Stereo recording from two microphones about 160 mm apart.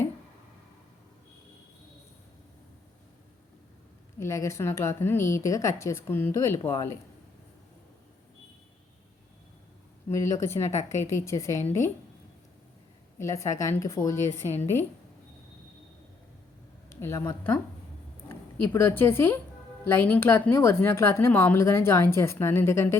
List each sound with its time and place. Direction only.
4.2 s a woman's voice: 20° left (ahead or behind)
10.1 s a woman's voice: 20° left (ahead or behind)
13.1 s a woman's voice: 20° left (ahead or behind)
16.9 s a woman's voice: 15° left (ahead or behind)